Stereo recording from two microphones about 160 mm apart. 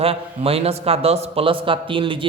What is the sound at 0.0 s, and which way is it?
A man's voice, 35° right (ahead or behind).